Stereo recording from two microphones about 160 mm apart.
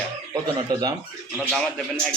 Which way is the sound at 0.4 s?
25° right (ahead or behind).